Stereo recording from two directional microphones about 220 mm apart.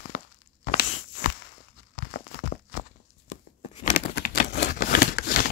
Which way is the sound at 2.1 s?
40° left (ahead or behind).